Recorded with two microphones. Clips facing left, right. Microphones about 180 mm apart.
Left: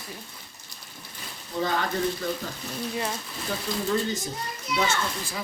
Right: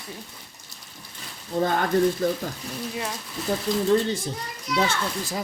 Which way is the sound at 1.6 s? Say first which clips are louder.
Right 3 dB; 50° right (ahead or behind).